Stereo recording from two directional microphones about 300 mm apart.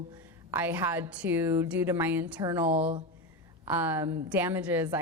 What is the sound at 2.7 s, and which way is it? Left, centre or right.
Speech, centre.